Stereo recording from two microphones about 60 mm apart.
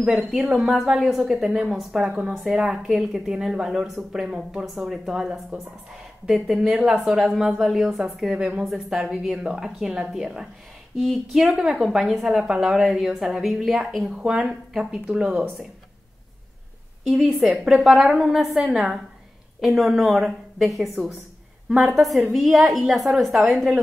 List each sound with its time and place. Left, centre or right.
0.6 s a woman's voice: centre
8.6 s a woman's voice: centre
14.1 s a woman's voice: centre
17.1 s a woman's voice: centre